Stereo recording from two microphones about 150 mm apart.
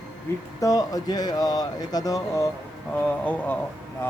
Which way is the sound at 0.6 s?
25° left (ahead or behind).